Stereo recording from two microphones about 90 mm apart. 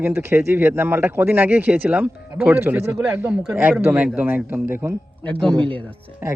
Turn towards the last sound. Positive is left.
turn(degrees=-25)  # may be behind; listen again after turning